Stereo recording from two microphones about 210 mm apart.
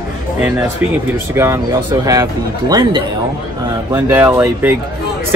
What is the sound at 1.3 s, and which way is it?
Speech, 15° right (ahead or behind).